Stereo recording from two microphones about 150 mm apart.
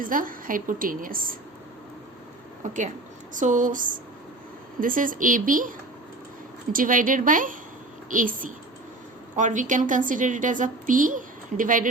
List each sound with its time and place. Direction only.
0.0 s a woman's voice: 65° right (ahead or behind)
2.6 s a woman's voice: 55° right (ahead or behind)
6.7 s a woman's voice: 65° right (ahead or behind)